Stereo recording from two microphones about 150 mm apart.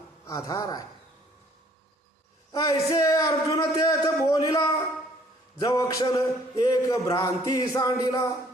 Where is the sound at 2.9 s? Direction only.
20° left (ahead or behind).